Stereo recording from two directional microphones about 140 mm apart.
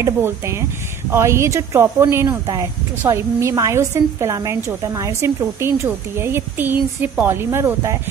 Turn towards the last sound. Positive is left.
turn(degrees=-20)  # may be behind; listen again after turning